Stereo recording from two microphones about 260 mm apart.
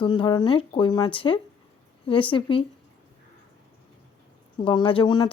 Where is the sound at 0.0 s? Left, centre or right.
Centre.